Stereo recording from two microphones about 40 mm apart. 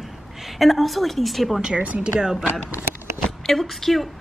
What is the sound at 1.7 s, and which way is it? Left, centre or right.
Speech, right.